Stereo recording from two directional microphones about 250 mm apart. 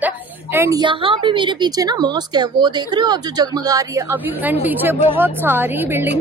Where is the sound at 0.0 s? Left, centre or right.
Centre.